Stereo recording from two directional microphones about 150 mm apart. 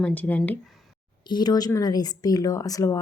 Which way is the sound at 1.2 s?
30° left (ahead or behind).